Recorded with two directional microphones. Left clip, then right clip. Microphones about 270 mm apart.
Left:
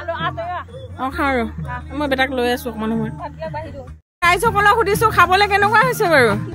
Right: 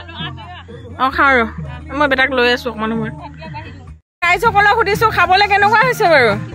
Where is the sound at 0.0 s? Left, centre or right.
Centre.